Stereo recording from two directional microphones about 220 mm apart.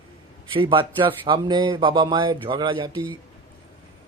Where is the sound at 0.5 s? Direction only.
20° right (ahead or behind).